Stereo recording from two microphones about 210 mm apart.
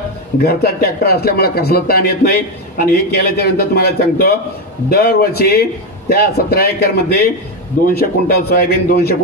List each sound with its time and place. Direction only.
0.4 s speech: 50° left (ahead or behind)